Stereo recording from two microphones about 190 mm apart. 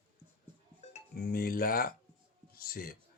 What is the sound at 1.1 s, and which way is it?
Speech, 50° left (ahead or behind).